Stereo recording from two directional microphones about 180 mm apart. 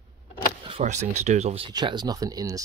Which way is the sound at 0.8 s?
40° right (ahead or behind).